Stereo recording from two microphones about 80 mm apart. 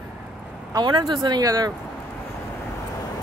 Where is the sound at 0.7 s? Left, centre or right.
Right.